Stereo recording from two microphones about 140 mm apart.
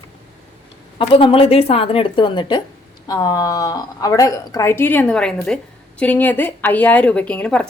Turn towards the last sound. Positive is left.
turn(degrees=10)  # may be behind; listen again after turning